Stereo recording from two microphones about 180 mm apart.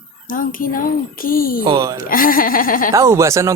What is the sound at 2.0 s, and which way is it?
Speech, 50° left (ahead or behind).